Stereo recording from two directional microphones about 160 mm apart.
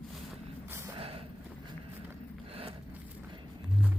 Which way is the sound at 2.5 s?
35° right (ahead or behind).